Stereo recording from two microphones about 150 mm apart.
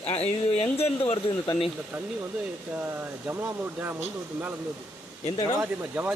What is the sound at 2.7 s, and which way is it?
Speech, 15° right (ahead or behind).